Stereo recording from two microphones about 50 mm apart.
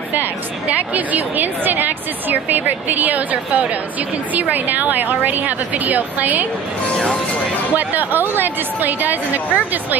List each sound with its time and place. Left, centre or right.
0.7 s a woman's voice: right
7.7 s a woman's voice: right